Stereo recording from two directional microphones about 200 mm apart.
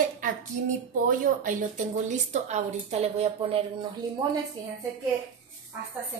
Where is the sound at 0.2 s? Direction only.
40° right (ahead or behind).